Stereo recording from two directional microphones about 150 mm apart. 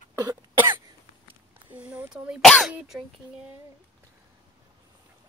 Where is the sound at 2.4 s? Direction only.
5° left (ahead or behind).